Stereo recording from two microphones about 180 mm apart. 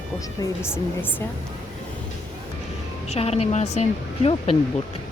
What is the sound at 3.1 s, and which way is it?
Speech, 35° left (ahead or behind).